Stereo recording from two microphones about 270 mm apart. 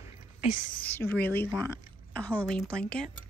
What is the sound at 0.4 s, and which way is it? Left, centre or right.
Speech, left.